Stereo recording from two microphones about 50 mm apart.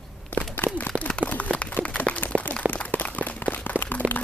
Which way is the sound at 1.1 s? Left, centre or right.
Left.